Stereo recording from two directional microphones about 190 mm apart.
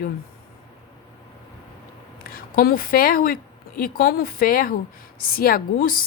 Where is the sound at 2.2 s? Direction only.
50° left (ahead or behind).